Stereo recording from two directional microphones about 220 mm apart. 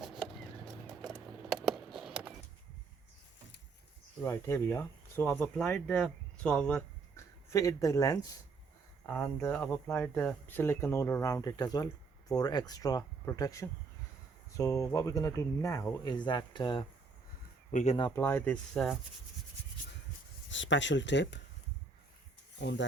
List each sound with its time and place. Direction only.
0.0 s a sound: centre (ahead or behind)
0.9 s music: 5° right (ahead or behind)
4.2 s speech: 10° left (ahead or behind)
17.7 s speech: 35° left (ahead or behind)
17.9 s speech: 15° left (ahead or behind)
20.5 s speech: 55° left (ahead or behind)
22.6 s speech: 50° left (ahead or behind)